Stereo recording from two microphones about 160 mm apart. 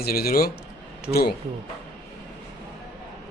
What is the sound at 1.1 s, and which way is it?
Speech, 80° left.